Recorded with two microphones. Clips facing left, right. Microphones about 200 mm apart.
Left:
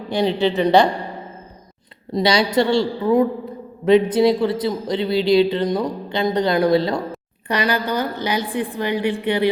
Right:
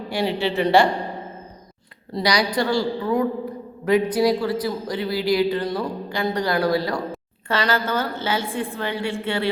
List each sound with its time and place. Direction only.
0.1 s speech: 20° left (ahead or behind)
2.1 s a woman's voice: 25° left (ahead or behind)